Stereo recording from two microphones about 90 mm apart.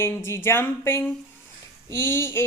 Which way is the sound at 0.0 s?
25° left (ahead or behind).